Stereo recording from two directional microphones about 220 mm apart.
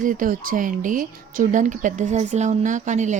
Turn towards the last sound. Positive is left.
turn(degrees=-35)  # may be behind; listen again after turning